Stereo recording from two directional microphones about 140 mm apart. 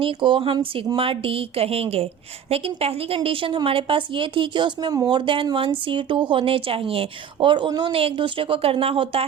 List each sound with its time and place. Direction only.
0.0 s a woman's voice: 40° right (ahead or behind)